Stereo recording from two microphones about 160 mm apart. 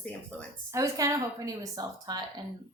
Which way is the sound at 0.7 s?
20° right (ahead or behind).